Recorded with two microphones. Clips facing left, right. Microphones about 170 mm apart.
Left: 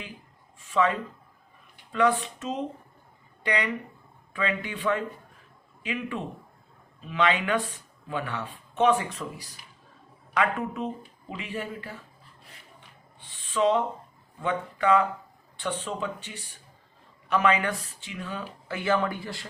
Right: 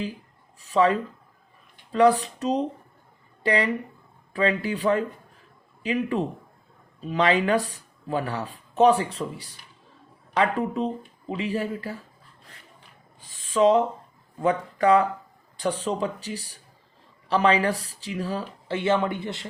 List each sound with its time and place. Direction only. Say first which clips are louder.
0.6 s a sound: right 4 dB; 35° right (ahead or behind)
1.9 s speech: right 5 dB; 35° right (ahead or behind)
13.1 s owl: right 5 dB; 40° right (ahead or behind)
14.4 s speech: right 4 dB; 40° right (ahead or behind); by 19.5 s 20° right (ahead or behind)